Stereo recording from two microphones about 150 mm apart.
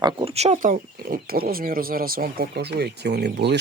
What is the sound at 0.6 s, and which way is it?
Speech, 75° right (ahead or behind).